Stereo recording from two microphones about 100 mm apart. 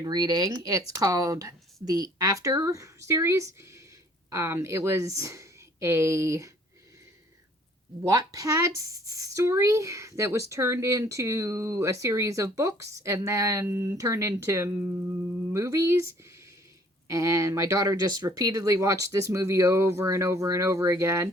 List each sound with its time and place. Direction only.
0.0 s a woman's voice: 40° right (ahead or behind)
8.0 s speech: 35° right (ahead or behind)